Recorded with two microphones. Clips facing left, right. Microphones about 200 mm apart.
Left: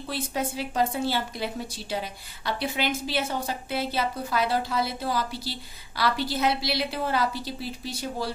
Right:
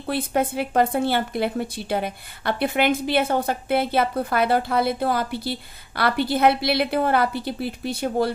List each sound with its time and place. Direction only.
0.0 s speech: 60° right (ahead or behind)